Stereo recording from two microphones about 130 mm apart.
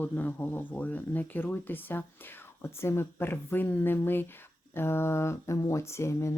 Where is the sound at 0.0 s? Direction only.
15° left (ahead or behind).